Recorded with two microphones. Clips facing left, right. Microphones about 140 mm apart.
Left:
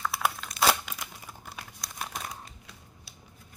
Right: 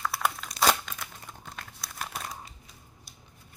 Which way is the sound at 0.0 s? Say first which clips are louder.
Even; centre (ahead or behind).